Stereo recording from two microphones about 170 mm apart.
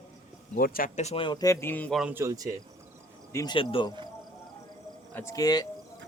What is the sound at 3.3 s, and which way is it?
Speech, 25° left (ahead or behind).